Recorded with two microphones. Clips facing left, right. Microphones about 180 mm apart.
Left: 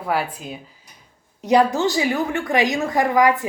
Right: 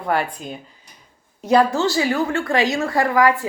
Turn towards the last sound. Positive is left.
turn(degrees=20)  # may be behind; listen again after turning